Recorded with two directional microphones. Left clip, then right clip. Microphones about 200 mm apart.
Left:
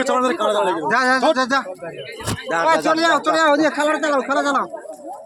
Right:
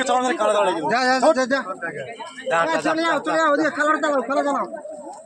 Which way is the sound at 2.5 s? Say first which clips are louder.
Left 2 dB; 25° left (ahead or behind).